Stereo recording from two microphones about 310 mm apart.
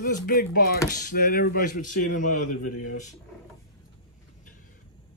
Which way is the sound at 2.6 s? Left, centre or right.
Left.